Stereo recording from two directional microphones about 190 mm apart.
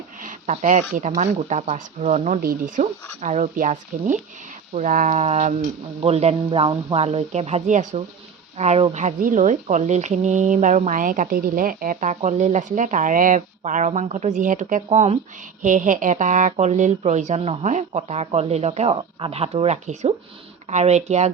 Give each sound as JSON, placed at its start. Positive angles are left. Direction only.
{"t": 0.2, "sound": "speech", "side_deg": -40}